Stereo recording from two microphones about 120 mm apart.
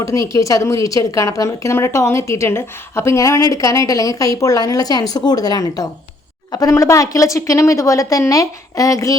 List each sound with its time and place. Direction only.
0.0 s a woman's voice: 25° left (ahead or behind)